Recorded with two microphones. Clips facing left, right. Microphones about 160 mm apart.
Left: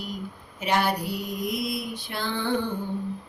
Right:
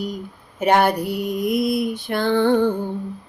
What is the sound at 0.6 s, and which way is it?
Mantra, 55° right (ahead or behind).